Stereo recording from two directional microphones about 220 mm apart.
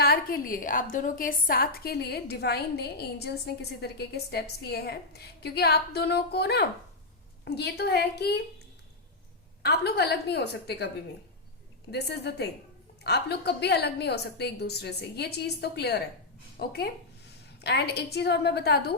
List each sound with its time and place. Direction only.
0.0 s a woman's voice: 45° left (ahead or behind)
9.6 s a woman's voice: 45° left (ahead or behind)
11.9 s a woman's voice: 50° left (ahead or behind)